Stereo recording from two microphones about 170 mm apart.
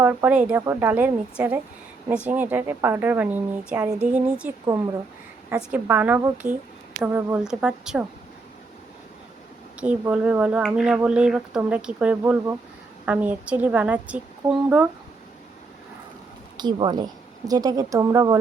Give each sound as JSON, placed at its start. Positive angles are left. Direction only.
{"t": 0.0, "sound": "speech", "side_deg": -10}
{"t": 4.6, "sound": "a woman's voice", "side_deg": -20}
{"t": 9.8, "sound": "speech", "side_deg": -10}
{"t": 16.6, "sound": "a woman's voice", "side_deg": -25}